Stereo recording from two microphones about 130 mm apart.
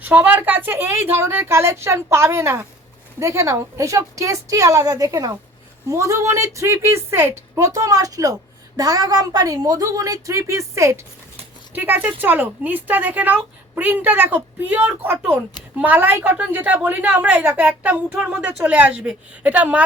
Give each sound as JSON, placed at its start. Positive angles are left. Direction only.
{"t": 0.0, "sound": "a woman's voice", "side_deg": -15}